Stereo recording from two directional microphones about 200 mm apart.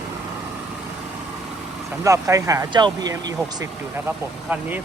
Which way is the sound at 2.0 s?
15° right (ahead or behind).